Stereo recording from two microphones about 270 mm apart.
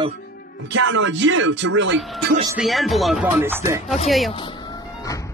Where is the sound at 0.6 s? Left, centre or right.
Right.